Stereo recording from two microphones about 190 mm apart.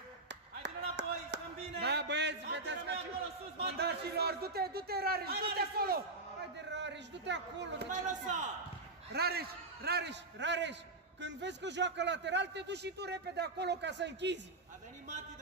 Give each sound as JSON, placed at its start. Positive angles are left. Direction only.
{"t": 0.3, "sound": "clapping", "side_deg": -65}
{"t": 3.6, "sound": "speech", "side_deg": -60}
{"t": 6.7, "sound": "a man's voice", "side_deg": -70}
{"t": 8.1, "sound": "a man's voice", "side_deg": -40}
{"t": 9.1, "sound": "a man's voice", "side_deg": -55}